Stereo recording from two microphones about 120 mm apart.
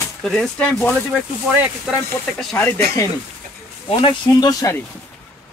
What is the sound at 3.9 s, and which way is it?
Speech, 45° left (ahead or behind).